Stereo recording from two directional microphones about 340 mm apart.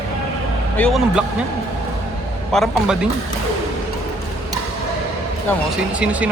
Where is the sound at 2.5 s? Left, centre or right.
Centre.